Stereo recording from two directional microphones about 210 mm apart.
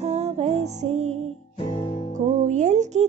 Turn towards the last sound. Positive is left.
turn(degrees=-35)  # may be behind; listen again after turning